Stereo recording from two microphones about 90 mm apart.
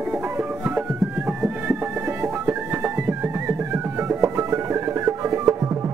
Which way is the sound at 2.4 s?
25° right (ahead or behind).